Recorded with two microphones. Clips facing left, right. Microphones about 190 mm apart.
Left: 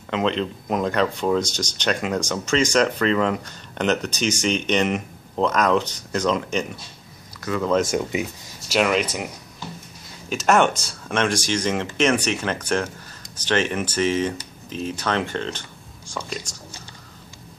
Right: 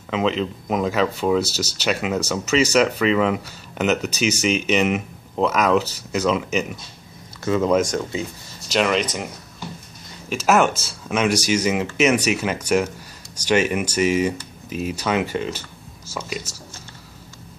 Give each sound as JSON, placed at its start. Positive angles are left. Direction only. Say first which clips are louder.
{"t": 0.1, "sound": "speech", "louder": "right 1 dB", "side_deg": -5}
{"t": 7.4, "sound": "speech", "louder": "right 5 dB", "side_deg": -20}
{"t": 7.8, "sound": "speech", "louder": "left 1 dB", "side_deg": 10}
{"t": 10.3, "sound": "speech", "louder": "right 1 dB", "side_deg": -5}